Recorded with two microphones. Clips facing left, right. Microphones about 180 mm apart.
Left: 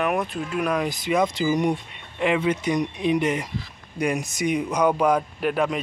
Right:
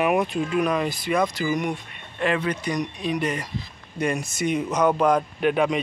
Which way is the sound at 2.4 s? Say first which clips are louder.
Left 3 dB; 25° left (ahead or behind).